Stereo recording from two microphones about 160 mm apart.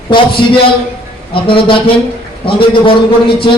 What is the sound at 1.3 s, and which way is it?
A man's voice, 35° left (ahead or behind).